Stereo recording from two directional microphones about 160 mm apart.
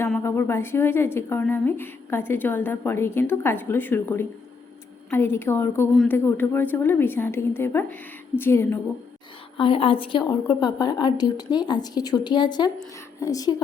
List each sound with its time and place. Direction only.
0.2 s a woman's voice: 15° left (ahead or behind)
9.6 s a woman's voice: 35° left (ahead or behind)